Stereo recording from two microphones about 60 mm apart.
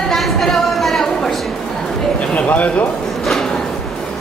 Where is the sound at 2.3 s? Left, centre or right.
Left.